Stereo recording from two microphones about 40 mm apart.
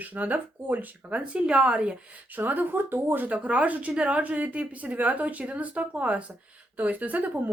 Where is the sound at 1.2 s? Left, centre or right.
Right.